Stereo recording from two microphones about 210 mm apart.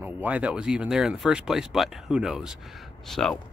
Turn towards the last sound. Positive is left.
turn(degrees=0)  # may be behind; listen again after turning